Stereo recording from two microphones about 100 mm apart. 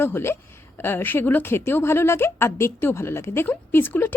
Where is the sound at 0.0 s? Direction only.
25° left (ahead or behind).